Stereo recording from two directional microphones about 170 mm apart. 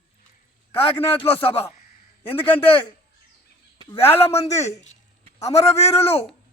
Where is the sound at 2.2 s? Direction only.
10° left (ahead or behind).